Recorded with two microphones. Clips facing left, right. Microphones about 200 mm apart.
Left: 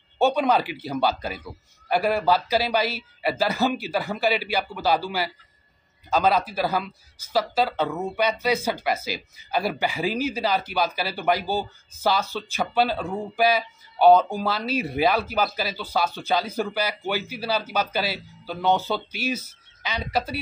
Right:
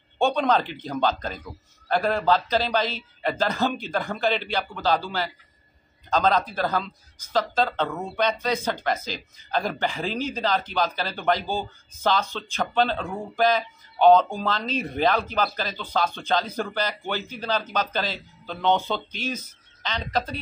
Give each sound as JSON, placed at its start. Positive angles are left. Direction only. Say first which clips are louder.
{"t": 0.2, "sound": "speech", "louder": "left 1 dB", "side_deg": 10}